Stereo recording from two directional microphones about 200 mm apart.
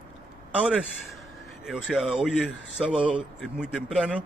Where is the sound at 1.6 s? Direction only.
Centre (ahead or behind).